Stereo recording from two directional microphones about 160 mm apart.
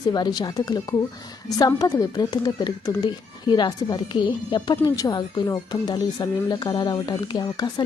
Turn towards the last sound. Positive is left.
turn(degrees=25)  # may be behind; listen again after turning